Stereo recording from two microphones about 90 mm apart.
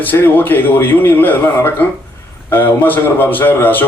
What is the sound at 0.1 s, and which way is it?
A man's voice, 20° left (ahead or behind).